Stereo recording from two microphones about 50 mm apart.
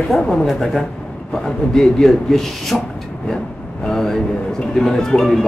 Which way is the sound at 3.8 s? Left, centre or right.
Centre.